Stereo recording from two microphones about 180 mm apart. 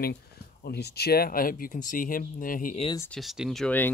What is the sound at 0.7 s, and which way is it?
Speech, 65° left (ahead or behind).